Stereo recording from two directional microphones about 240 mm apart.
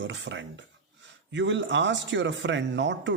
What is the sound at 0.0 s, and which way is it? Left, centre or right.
A man's voice, right.